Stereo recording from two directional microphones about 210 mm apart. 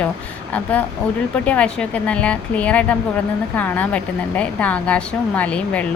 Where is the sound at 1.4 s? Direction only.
5° left (ahead or behind).